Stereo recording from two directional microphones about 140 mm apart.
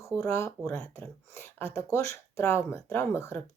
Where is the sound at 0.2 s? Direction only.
20° left (ahead or behind).